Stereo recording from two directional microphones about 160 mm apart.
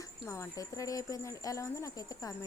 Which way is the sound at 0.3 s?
20° left (ahead or behind).